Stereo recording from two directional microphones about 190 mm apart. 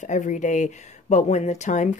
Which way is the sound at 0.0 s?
40° left (ahead or behind).